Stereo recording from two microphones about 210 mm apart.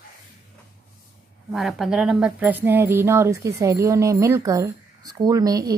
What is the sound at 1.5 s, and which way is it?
Speech, centre (ahead or behind).